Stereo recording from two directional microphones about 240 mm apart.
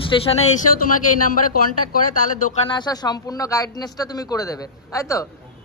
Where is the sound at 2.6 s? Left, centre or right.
Centre.